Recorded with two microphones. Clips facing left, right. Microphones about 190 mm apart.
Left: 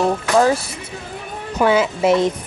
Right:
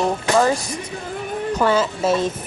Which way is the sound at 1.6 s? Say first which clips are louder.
Left 4 dB; 10° left (ahead or behind).